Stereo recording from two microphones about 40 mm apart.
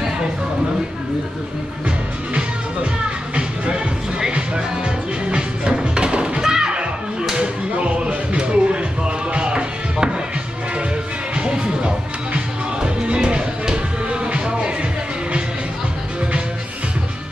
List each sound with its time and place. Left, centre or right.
4.3 s music: right
6.4 s thump: centre
7.3 s a sound: right
7.9 s music: right
11.3 s music: right